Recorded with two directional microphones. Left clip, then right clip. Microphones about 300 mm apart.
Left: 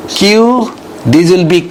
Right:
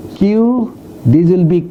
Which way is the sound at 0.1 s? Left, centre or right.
Centre.